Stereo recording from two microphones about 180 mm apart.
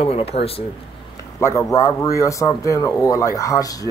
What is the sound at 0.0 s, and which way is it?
Speech, 35° left (ahead or behind).